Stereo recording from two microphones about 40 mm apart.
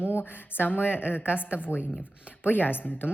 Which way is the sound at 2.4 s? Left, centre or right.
Left.